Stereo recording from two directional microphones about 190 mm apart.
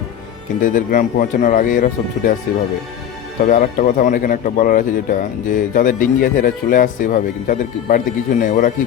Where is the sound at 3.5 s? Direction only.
45° left (ahead or behind).